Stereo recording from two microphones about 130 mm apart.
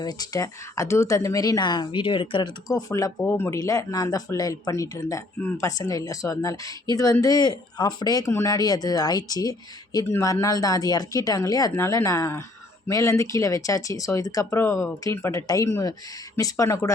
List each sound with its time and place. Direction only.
0.0 s speech: 30° left (ahead or behind)